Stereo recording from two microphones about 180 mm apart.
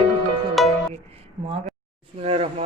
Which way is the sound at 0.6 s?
Centre (ahead or behind).